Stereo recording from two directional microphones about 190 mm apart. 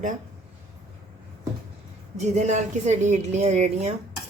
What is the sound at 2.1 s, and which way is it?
Speech, 40° right (ahead or behind).